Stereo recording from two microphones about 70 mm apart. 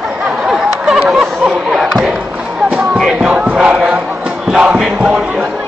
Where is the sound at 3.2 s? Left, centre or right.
Centre.